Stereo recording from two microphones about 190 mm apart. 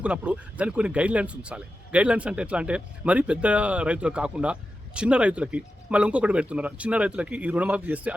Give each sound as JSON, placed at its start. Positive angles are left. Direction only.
{"t": 0.0, "sound": "speech", "side_deg": -5}